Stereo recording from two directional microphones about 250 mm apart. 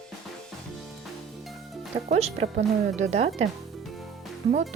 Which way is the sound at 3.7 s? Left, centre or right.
Centre.